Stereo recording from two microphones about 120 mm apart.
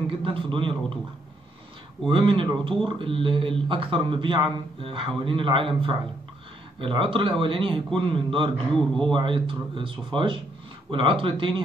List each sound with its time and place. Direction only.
0.2 s speech: 45° right (ahead or behind)
2.0 s speech: 45° right (ahead or behind)
8.7 s speech: 5° left (ahead or behind)
9.1 s speech: 45° right (ahead or behind)